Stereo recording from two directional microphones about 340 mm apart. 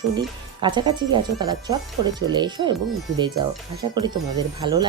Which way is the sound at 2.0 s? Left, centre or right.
Right.